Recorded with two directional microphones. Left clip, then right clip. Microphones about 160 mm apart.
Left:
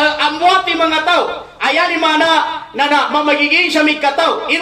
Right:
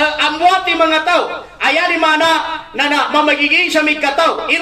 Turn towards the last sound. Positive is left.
turn(degrees=-45)  # may be behind; listen again after turning